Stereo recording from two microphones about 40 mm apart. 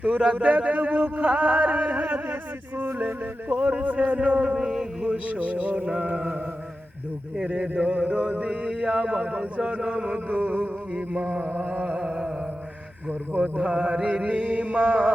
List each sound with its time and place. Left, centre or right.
0.3 s mantra: right
2.2 s music: right
3.5 s mantra: right
4.7 s a man's voice: centre
5.0 s mantra: right
7.3 s a sound: right
7.9 s mantra: right
8.4 s a sound: right
10.3 s music: right
10.9 s mantra: right